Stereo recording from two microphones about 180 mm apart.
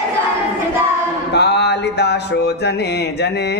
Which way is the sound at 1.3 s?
70° left (ahead or behind).